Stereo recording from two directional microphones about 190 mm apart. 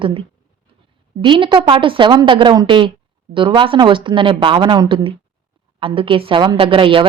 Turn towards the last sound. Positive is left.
turn(degrees=-25)  # may be behind; listen again after turning